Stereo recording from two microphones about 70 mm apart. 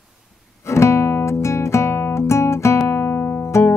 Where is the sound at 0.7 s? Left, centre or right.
Left.